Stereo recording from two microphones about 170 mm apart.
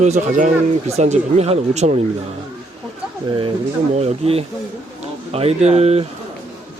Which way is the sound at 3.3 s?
30° right (ahead or behind).